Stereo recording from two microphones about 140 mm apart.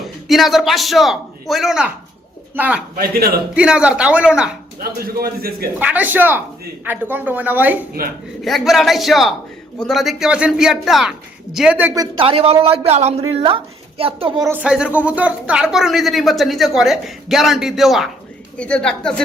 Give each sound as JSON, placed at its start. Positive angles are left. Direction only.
{"t": 0.0, "sound": "a man's voice", "side_deg": 0}
{"t": 2.9, "sound": "a man's voice", "side_deg": -90}
{"t": 3.5, "sound": "speech", "side_deg": -5}
{"t": 4.8, "sound": "a man's voice", "side_deg": -90}
{"t": 5.8, "sound": "speech", "side_deg": -10}
{"t": 8.4, "sound": "speech", "side_deg": 0}
{"t": 11.9, "sound": "speech", "side_deg": -40}
{"t": 14.6, "sound": "speech", "side_deg": -5}